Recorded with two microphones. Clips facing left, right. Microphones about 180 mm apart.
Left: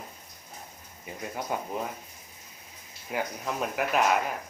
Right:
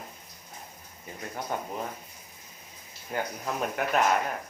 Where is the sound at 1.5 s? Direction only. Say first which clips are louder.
Even; 10° left (ahead or behind).